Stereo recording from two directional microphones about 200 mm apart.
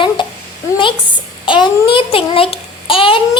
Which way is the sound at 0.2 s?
20° left (ahead or behind).